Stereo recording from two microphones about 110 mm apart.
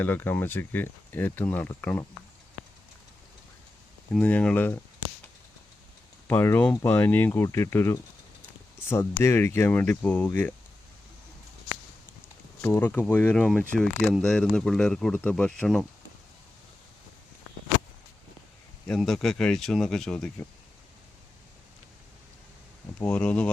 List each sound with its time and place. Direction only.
0.0 s speech: 20° left (ahead or behind)
4.1 s speech: 10° left (ahead or behind)
6.2 s speech: 20° left (ahead or behind)
7.4 s speech: 25° left (ahead or behind)
12.6 s speech: 20° left (ahead or behind); by 15.9 s 5° left (ahead or behind)
18.9 s speech: 5° left (ahead or behind)
23.0 s speech: 10° left (ahead or behind)